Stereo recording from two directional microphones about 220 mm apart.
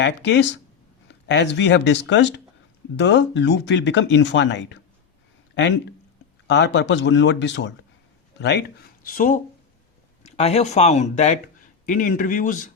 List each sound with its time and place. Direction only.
0.0 s speech: 55° left (ahead or behind)
6.5 s speech: 50° left (ahead or behind); by 12.7 s 35° left (ahead or behind)